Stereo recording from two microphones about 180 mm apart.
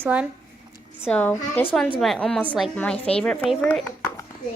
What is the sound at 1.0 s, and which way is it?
A woman's voice, 10° left (ahead or behind).